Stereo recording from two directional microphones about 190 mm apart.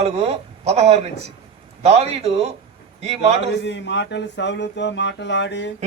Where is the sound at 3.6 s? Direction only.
70° left (ahead or behind).